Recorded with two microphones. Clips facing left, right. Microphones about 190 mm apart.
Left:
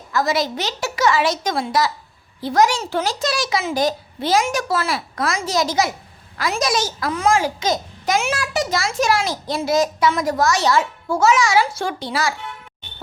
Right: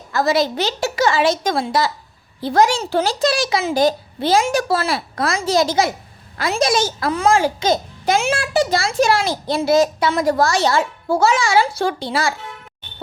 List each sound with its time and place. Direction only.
0.1 s a woman's voice: 30° right (ahead or behind)